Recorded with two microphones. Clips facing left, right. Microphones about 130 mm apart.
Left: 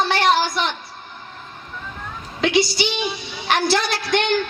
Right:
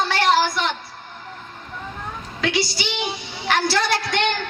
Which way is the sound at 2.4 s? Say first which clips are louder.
Left 5 dB; 20° left (ahead or behind).